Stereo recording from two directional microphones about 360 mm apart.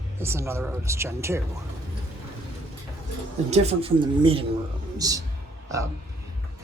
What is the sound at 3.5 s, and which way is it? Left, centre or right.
A man's voice, centre.